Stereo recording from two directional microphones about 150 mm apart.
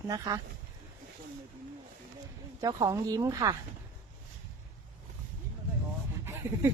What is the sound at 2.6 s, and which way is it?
Speech, 25° right (ahead or behind).